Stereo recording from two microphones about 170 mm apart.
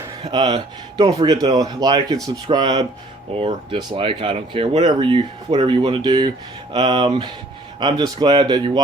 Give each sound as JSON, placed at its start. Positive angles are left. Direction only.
{"t": 0.2, "sound": "speech", "side_deg": -25}